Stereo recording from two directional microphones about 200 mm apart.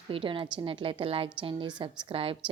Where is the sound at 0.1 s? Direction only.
25° right (ahead or behind).